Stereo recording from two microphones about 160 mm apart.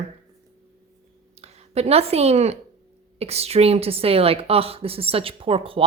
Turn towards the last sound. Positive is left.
turn(degrees=-35)  # may be behind; listen again after turning